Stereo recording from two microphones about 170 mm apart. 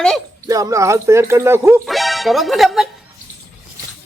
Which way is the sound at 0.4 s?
20° right (ahead or behind).